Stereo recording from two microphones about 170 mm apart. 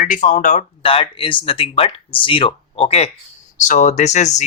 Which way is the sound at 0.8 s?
30° left (ahead or behind).